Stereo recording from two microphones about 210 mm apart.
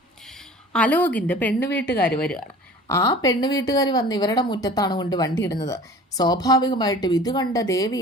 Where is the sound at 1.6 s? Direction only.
55° left (ahead or behind).